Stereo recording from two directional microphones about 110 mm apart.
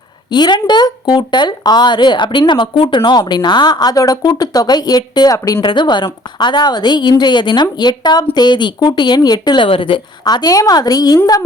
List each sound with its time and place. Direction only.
0.3 s a woman's voice: 40° left (ahead or behind)
5.5 s a woman's voice: 50° left (ahead or behind)
9.6 s speech: 55° left (ahead or behind); by 11.2 s 35° left (ahead or behind)